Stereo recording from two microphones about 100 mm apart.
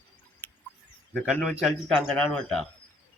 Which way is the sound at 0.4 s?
20° left (ahead or behind).